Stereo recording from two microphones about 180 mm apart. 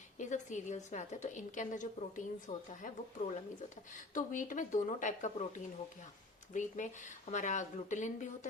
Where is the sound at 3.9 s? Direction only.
45° left (ahead or behind).